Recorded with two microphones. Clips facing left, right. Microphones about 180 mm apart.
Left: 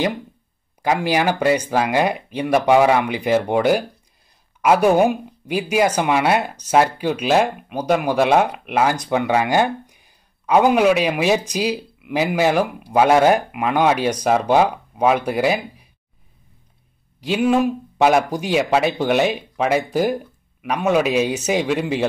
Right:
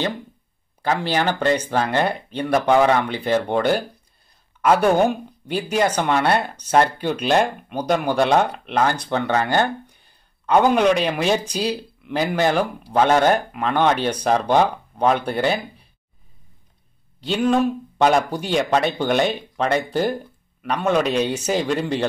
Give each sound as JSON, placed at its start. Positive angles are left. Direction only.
{"t": 0.8, "sound": "speech", "side_deg": 10}
{"t": 17.2, "sound": "speech", "side_deg": 10}